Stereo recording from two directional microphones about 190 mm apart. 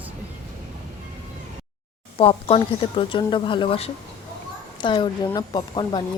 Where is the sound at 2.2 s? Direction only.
30° left (ahead or behind).